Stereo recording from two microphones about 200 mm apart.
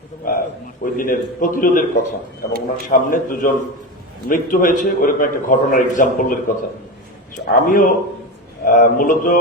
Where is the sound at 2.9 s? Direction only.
45° left (ahead or behind).